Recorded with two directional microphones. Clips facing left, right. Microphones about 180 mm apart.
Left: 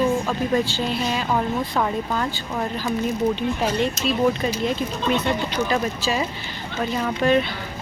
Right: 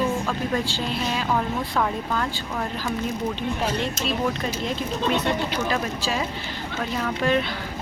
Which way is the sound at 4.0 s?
50° right (ahead or behind).